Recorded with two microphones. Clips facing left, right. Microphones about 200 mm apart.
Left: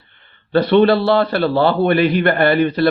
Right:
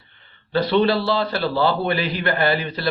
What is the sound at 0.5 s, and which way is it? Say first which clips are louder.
Speech: left 6 dB; 60° left (ahead or behind).